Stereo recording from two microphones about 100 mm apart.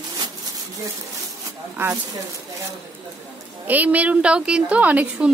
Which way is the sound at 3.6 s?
15° right (ahead or behind).